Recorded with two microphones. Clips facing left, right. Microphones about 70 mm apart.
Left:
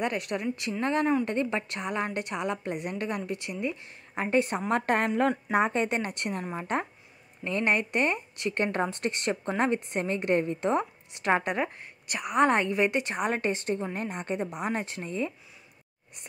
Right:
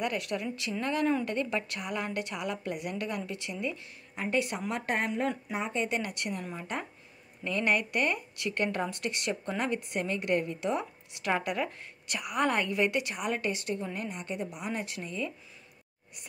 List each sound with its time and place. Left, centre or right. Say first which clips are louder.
0.0 s a woman's voice: left 3 dB; left
4.3 s a woman's voice: left 5 dB; left
7.4 s speech: left 2 dB; left